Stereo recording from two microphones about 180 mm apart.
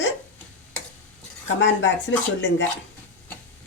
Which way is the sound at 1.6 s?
75° left (ahead or behind).